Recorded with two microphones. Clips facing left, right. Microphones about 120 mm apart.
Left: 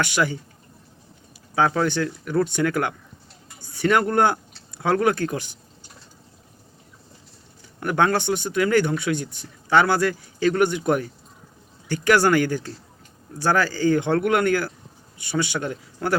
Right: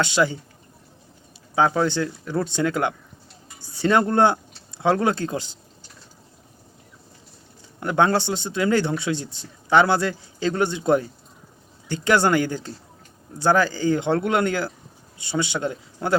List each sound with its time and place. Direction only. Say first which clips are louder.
0.0 s speech: right 2 dB; 25° right (ahead or behind)
1.5 s speech: right 1 dB; 20° right (ahead or behind)
7.8 s speech: right 1 dB; 20° right (ahead or behind)